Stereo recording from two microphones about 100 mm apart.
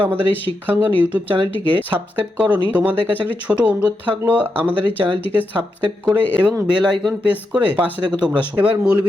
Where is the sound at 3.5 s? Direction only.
15° right (ahead or behind).